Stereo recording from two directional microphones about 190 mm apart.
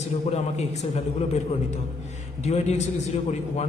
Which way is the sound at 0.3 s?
35° left (ahead or behind).